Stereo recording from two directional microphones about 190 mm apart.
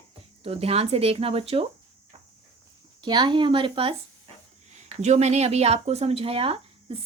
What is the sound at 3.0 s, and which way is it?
A woman's voice, 25° right (ahead or behind).